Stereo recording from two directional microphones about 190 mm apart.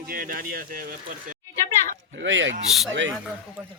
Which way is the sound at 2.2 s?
75° right (ahead or behind).